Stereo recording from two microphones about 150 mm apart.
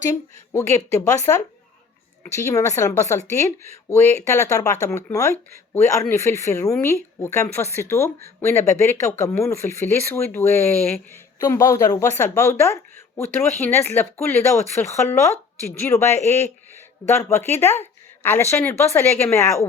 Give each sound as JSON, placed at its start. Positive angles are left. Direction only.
{"t": 1.3, "sound": "a woman's voice", "side_deg": 20}